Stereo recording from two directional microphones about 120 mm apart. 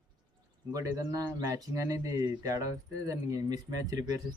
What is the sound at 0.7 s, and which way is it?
Speech, 30° right (ahead or behind).